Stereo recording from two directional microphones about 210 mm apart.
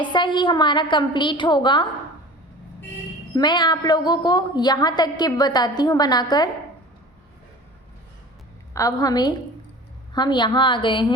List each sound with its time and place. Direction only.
0.0 s a woman's voice: 20° left (ahead or behind)
3.3 s a woman's voice: 20° left (ahead or behind)
8.7 s a woman's voice: 15° left (ahead or behind)